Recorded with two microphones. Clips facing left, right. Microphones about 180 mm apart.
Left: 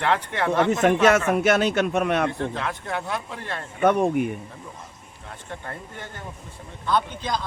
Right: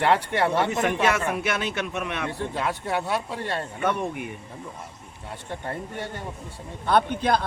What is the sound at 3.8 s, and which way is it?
Speech, 50° left (ahead or behind).